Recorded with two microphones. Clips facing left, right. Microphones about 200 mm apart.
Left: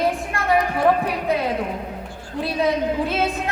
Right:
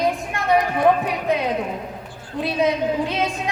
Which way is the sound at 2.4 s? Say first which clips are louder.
Right 1 dB; 20° right (ahead or behind).